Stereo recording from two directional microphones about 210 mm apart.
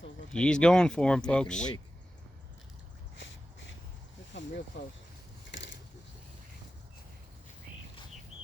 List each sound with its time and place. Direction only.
0.3 s speech: 5° left (ahead or behind)
4.7 s speech: 55° left (ahead or behind)
5.5 s a sound: 60° left (ahead or behind)